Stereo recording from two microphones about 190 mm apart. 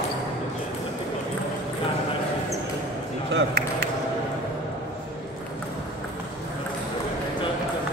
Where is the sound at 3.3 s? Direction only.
60° right (ahead or behind).